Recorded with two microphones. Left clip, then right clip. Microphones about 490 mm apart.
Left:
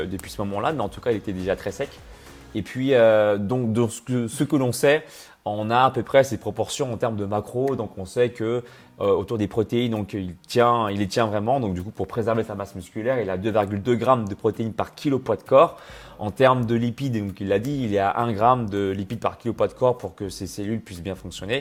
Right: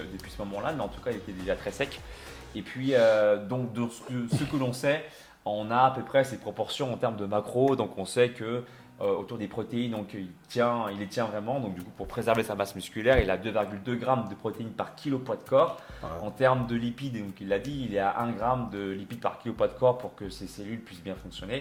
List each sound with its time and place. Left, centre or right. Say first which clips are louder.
0.3 s speech: left 7 dB; left
5.5 s speech: left 5 dB; left
7.7 s speech: left 1 dB; left
8.4 s speech: left 8 dB; left
12.1 s speech: left 2 dB; left
13.5 s speech: left 8 dB; left